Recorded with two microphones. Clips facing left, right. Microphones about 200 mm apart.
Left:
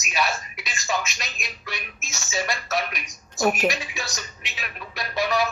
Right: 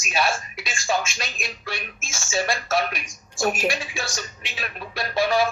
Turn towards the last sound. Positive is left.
turn(degrees=-30)  # may be behind; listen again after turning